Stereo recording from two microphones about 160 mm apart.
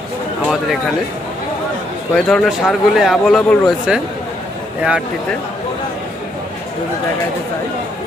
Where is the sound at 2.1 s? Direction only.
Centre (ahead or behind).